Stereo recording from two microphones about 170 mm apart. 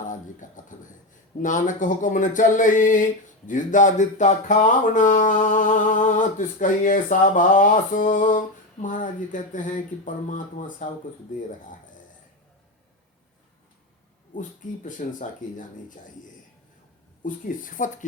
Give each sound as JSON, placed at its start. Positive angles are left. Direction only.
{"t": 0.0, "sound": "beatboxing", "side_deg": 50}
{"t": 1.4, "sound": "speech", "side_deg": 50}
{"t": 14.8, "sound": "speech", "side_deg": 50}
{"t": 17.2, "sound": "speech", "side_deg": 50}